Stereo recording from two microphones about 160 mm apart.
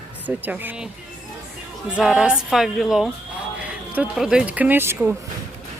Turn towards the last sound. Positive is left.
turn(degrees=-15)  # may be behind; listen again after turning